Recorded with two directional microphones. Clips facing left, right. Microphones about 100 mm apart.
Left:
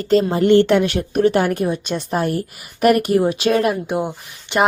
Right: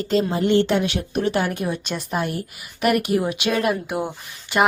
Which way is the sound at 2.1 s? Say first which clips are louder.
Left 5 dB; 40° left (ahead or behind).